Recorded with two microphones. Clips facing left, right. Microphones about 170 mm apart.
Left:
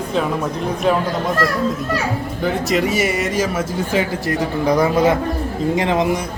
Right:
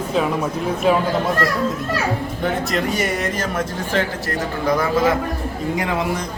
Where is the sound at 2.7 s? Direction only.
5° left (ahead or behind); by 6.2 s 20° left (ahead or behind).